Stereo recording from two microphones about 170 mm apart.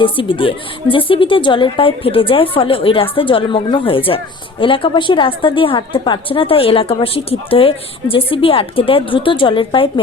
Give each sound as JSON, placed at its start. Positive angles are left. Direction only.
{"t": 0.0, "sound": "a woman's voice", "side_deg": 30}